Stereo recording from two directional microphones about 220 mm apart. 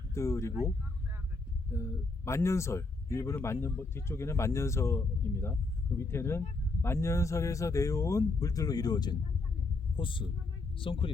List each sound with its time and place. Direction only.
0.1 s speech: 15° left (ahead or behind)
1.7 s speech: 15° left (ahead or behind)